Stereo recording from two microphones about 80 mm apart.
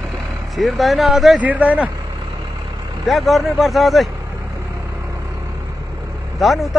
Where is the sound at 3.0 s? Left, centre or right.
Centre.